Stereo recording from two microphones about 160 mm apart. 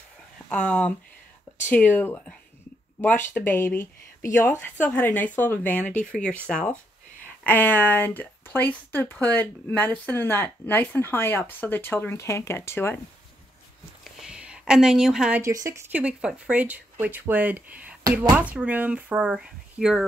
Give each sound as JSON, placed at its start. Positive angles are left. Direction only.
{"t": 0.5, "sound": "speech", "side_deg": 5}
{"t": 14.1, "sound": "a sound", "side_deg": -5}
{"t": 15.4, "sound": "speech", "side_deg": -20}